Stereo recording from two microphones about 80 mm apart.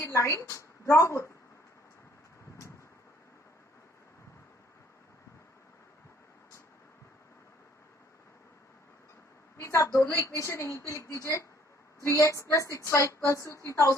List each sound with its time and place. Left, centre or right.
0.0 s a woman's voice: left
9.6 s a woman's voice: left